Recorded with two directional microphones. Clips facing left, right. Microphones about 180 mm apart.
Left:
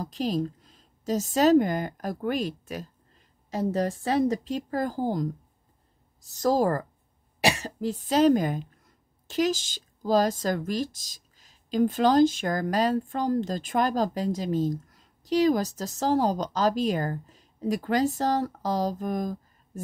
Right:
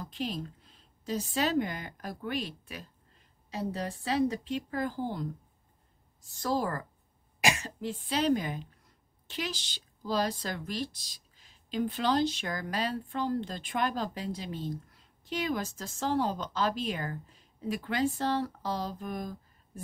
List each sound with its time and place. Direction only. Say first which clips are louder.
0.0 s a woman's voice: left 8 dB; 40° left (ahead or behind)